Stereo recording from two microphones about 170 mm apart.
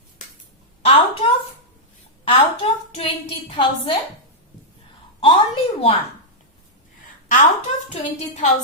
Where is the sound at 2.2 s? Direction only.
35° left (ahead or behind).